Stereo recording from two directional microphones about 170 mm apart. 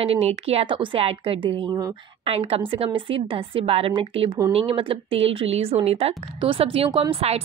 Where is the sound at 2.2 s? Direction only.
35° right (ahead or behind).